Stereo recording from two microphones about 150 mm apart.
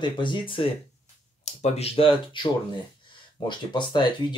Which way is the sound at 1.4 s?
45° left (ahead or behind).